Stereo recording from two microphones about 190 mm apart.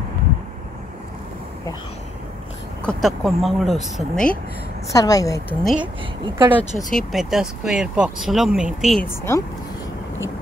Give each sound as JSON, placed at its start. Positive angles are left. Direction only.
{"t": 2.9, "sound": "speech", "side_deg": 0}
{"t": 4.9, "sound": "a woman's voice", "side_deg": 20}
{"t": 5.6, "sound": "speech", "side_deg": 0}
{"t": 6.2, "sound": "speech", "side_deg": -15}
{"t": 6.7, "sound": "speech", "side_deg": 45}
{"t": 7.0, "sound": "speech", "side_deg": 0}
{"t": 9.0, "sound": "a woman's voice", "side_deg": 10}